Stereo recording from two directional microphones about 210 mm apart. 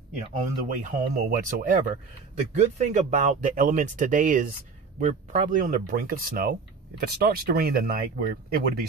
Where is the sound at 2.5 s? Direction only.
35° right (ahead or behind).